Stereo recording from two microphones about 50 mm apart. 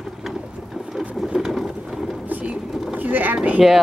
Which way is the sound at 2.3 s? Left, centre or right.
Right.